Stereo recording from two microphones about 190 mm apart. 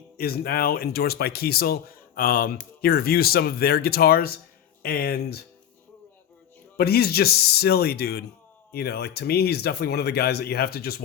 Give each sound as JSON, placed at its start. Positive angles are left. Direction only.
{"t": 0.2, "sound": "speech", "side_deg": 55}
{"t": 6.7, "sound": "speech", "side_deg": 55}